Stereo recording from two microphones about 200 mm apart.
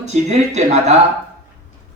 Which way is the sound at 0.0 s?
35° right (ahead or behind).